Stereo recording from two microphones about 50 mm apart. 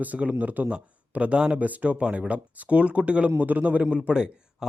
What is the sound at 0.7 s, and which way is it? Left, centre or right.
A man's voice, right.